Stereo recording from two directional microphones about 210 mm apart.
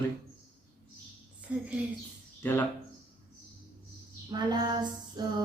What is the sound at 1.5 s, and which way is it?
Speech, 5° right (ahead or behind).